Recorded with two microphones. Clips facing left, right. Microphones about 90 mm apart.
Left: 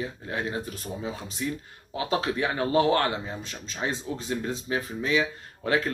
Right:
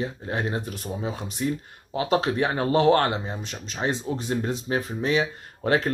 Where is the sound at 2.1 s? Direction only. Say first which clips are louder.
Right 4 dB; 25° right (ahead or behind).